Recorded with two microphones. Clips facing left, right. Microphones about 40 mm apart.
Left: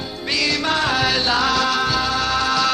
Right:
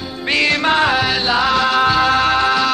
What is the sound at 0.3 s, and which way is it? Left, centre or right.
Music, right.